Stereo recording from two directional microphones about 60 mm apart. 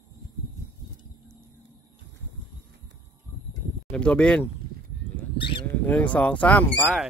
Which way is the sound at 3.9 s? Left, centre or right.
Centre.